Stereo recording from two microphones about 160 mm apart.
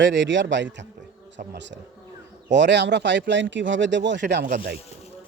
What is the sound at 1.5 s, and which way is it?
Speech, 90° right.